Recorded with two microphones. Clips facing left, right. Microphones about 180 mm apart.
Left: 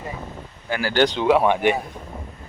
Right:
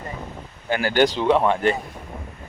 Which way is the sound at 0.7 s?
25° right (ahead or behind).